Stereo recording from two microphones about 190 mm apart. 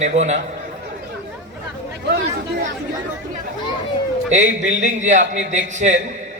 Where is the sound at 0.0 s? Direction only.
35° right (ahead or behind).